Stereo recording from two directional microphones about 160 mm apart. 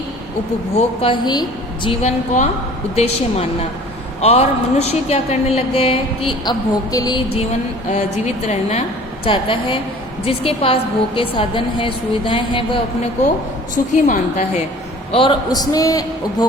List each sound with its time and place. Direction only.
0.8 s a woman's voice: 35° left (ahead or behind)
7.9 s a woman's voice: 45° left (ahead or behind)
9.2 s a woman's voice: 35° left (ahead or behind)
13.7 s a woman's voice: 50° left (ahead or behind)
15.1 s a man's voice: 35° left (ahead or behind)